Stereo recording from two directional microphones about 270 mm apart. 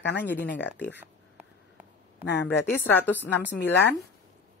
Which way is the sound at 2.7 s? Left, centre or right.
Centre.